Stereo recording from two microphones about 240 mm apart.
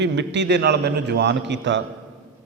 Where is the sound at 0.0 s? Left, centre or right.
Right.